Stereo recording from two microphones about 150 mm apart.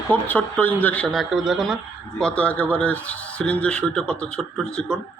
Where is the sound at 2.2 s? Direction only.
10° left (ahead or behind).